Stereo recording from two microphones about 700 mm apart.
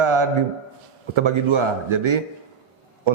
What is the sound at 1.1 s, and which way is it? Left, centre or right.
A man's voice, right.